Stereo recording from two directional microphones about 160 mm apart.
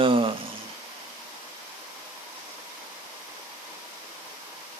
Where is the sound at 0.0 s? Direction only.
35° right (ahead or behind).